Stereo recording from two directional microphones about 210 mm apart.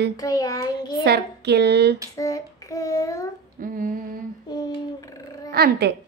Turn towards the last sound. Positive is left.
turn(degrees=-50)  # may be behind; listen again after turning